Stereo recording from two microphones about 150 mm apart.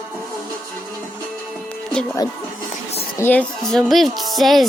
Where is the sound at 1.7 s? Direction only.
5° left (ahead or behind).